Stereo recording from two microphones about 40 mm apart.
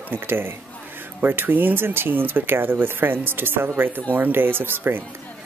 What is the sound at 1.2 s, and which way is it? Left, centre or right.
Speech, right.